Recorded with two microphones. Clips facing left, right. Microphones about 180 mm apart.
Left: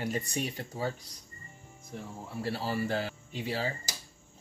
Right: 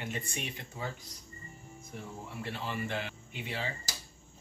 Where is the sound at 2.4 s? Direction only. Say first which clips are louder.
Left 6 dB; 35° left (ahead or behind).